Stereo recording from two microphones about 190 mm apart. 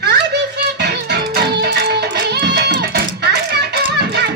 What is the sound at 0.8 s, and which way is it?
Music, 55° right (ahead or behind).